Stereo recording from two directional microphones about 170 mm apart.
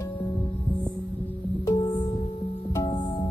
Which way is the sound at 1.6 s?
25° left (ahead or behind).